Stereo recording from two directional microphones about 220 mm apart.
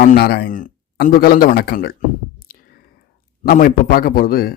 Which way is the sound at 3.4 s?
40° left (ahead or behind).